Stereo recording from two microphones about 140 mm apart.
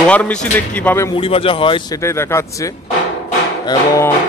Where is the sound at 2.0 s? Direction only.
20° left (ahead or behind).